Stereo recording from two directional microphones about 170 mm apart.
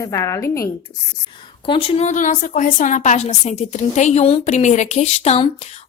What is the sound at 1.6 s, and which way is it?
A woman's voice, 30° left (ahead or behind).